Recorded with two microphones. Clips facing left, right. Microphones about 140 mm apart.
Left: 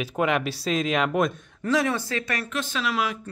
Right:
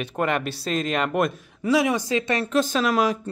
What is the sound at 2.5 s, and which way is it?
Speech, 40° right (ahead or behind).